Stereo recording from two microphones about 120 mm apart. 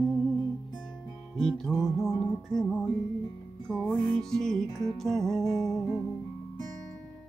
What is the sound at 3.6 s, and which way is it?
Music, 20° right (ahead or behind).